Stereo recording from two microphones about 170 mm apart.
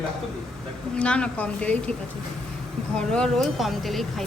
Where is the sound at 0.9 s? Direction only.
5° left (ahead or behind).